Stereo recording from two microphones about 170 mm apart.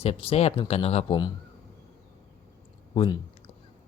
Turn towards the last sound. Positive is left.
turn(degrees=30)  # may be behind; listen again after turning